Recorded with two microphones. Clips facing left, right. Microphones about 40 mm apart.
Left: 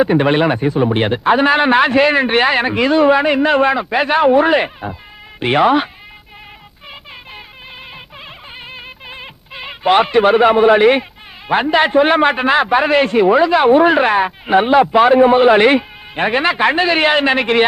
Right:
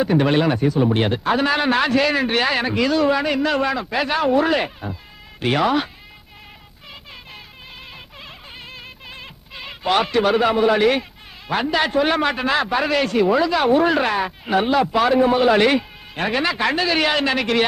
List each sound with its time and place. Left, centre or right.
0.0 s a man's voice: left
8.7 s music: left
11.4 s a man's voice: left